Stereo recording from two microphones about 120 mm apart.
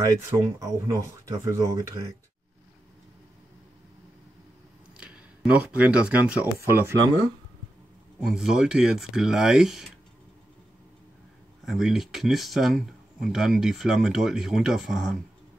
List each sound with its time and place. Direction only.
0.3 s speech: 25° right (ahead or behind)
4.9 s speech: 10° right (ahead or behind)
8.2 s speech: 5° right (ahead or behind)
11.6 s speech: centre (ahead or behind)